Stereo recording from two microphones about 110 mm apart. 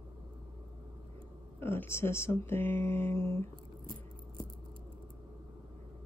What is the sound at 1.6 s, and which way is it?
Speech, 20° left (ahead or behind).